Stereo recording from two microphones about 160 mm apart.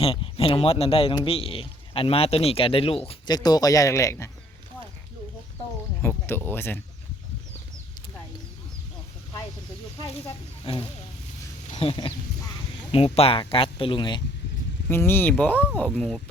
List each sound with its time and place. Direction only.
0.0 s speech: 35° left (ahead or behind)
3.2 s speech: 25° left (ahead or behind)
6.0 s speech: 15° left (ahead or behind)
10.7 s speech: 30° left (ahead or behind)
13.1 s speech: 35° left (ahead or behind)
14.8 s speech: 15° left (ahead or behind)